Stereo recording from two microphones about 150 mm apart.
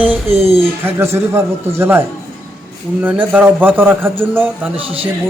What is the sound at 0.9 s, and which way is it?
A man's voice, 15° right (ahead or behind).